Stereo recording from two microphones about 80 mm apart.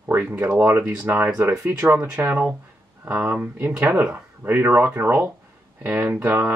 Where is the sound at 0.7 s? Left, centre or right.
Right.